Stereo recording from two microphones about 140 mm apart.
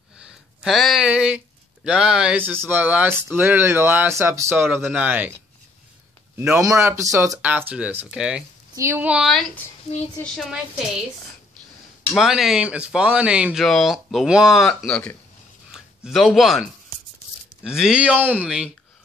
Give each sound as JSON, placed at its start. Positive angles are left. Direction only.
{"t": 0.2, "sound": "speech", "side_deg": -5}
{"t": 6.3, "sound": "speech", "side_deg": -15}
{"t": 8.7, "sound": "speech", "side_deg": -15}
{"t": 12.1, "sound": "speech", "side_deg": 0}
{"t": 17.6, "sound": "speech", "side_deg": -5}